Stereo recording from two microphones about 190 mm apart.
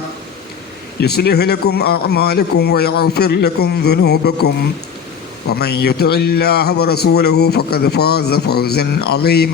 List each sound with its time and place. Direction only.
1.0 s a man's voice: 55° left (ahead or behind)